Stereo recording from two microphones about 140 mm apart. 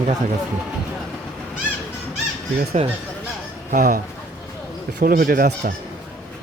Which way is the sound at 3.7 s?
75° right (ahead or behind).